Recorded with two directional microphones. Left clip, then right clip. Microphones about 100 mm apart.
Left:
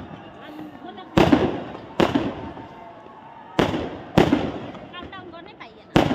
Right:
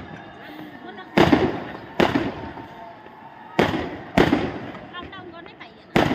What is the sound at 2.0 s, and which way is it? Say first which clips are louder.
Fireworks: right 1 dB; 40° left (ahead or behind).